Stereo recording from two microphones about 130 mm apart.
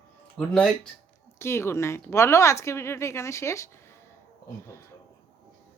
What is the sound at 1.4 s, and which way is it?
A woman's voice, 20° left (ahead or behind).